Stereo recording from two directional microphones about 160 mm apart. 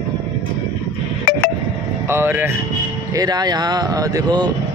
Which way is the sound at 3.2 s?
25° right (ahead or behind).